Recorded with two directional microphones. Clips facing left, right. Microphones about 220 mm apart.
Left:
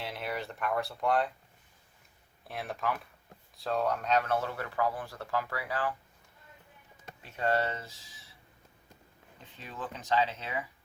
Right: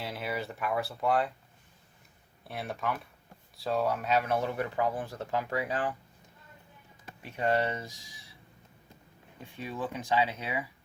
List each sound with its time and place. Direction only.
0.0 s speech: centre (ahead or behind)
2.5 s speech: centre (ahead or behind); by 5.9 s 20° right (ahead or behind)
7.2 s speech: 15° right (ahead or behind)
9.4 s speech: 10° right (ahead or behind)